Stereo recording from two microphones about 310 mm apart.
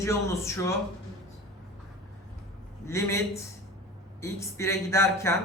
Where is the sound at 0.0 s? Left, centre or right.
Centre.